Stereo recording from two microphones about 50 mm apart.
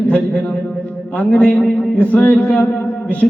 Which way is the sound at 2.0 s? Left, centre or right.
Left.